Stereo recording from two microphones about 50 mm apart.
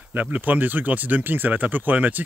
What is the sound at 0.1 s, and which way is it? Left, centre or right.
Speech, right.